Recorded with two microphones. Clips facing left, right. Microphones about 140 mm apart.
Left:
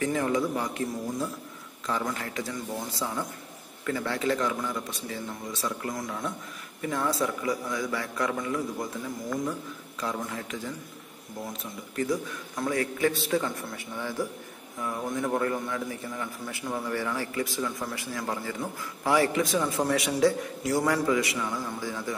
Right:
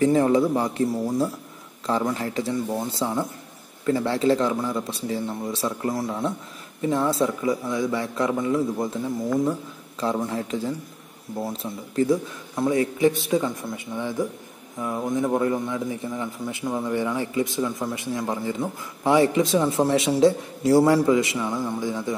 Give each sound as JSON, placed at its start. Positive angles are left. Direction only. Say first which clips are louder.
{"t": 0.0, "sound": "a man's voice", "louder": "right 8 dB", "side_deg": -30}